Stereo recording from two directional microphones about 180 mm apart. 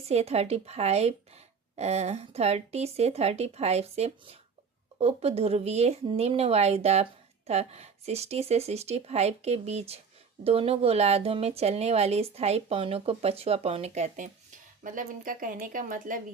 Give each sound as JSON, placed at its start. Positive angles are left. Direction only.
{"t": 0.0, "sound": "speech", "side_deg": -35}
{"t": 14.8, "sound": "speech", "side_deg": -50}